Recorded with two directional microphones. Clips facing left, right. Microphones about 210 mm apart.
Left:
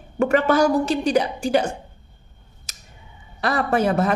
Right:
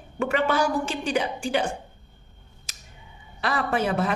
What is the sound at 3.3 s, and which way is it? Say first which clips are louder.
Speech: left 5 dB; 45° left (ahead or behind).